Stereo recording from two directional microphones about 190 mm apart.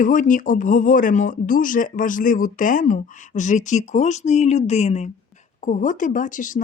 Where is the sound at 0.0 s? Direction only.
45° left (ahead or behind).